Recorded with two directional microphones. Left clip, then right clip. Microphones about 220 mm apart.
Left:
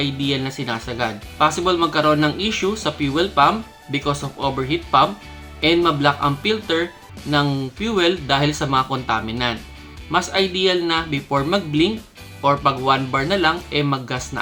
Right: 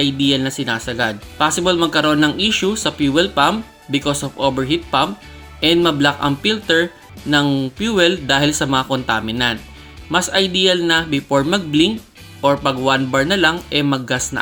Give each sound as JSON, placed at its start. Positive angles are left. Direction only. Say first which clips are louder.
{"t": 0.0, "sound": "speech", "louder": "right 5 dB", "side_deg": -20}